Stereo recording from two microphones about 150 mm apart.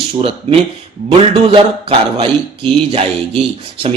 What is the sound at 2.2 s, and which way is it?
Speech, 45° right (ahead or behind).